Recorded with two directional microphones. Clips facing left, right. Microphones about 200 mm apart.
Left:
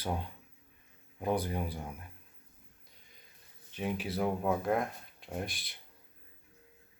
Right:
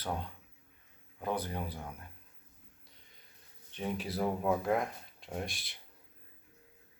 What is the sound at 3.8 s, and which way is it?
Speech, centre (ahead or behind).